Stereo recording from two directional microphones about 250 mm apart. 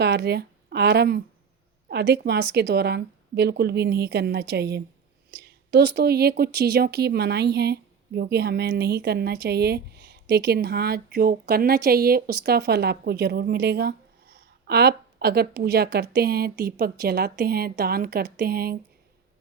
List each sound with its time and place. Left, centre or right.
0.0 s speech: right